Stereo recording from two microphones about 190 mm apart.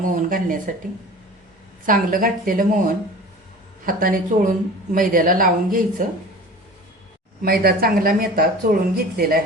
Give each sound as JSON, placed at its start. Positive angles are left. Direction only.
{"t": 0.0, "sound": "speech", "side_deg": -45}
{"t": 1.9, "sound": "speech", "side_deg": -45}
{"t": 7.4, "sound": "speech", "side_deg": -50}